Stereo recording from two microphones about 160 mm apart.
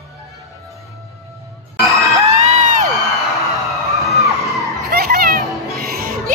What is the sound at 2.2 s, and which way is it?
Crowd, 45° right (ahead or behind).